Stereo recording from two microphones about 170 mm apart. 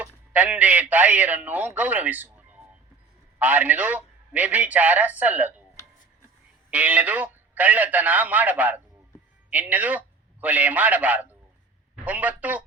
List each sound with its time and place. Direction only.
0.0 s a man's voice: 10° right (ahead or behind)
6.7 s a man's voice: 10° right (ahead or behind)